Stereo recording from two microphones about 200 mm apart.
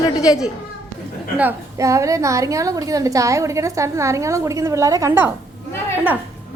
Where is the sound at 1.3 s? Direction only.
10° right (ahead or behind).